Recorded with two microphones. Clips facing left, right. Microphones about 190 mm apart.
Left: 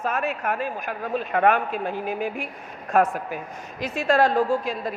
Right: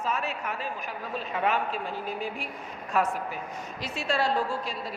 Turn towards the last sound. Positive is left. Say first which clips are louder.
# left 8 dB
turn(degrees=50)  # may be behind; listen again after turning